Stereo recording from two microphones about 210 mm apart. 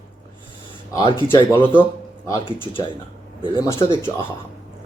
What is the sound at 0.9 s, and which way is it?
Speech, 20° left (ahead or behind).